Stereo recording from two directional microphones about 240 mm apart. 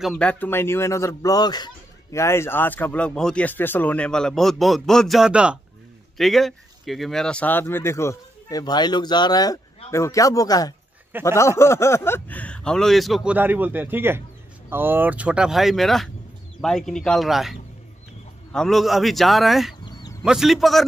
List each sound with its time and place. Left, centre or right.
0.0 s speech: centre
19.8 s a sound: centre
20.2 s speech: centre